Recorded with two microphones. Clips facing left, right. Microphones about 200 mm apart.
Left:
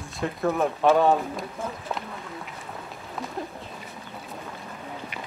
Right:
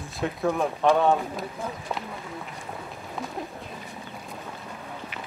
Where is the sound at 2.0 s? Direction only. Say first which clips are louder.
Even; centre (ahead or behind).